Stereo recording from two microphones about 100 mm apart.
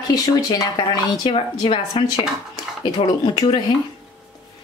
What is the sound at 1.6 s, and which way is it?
Speech, 65° left (ahead or behind).